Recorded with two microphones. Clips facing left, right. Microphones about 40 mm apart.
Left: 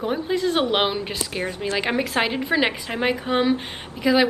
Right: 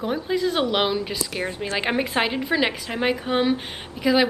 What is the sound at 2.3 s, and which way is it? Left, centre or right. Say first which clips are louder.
A woman's voice: left 1 dB; centre.